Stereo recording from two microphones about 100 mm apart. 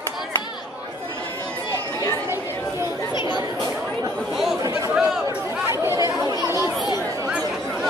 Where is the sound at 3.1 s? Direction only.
50° left (ahead or behind).